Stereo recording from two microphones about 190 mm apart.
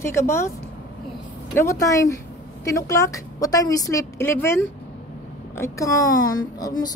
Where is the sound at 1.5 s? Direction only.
15° left (ahead or behind).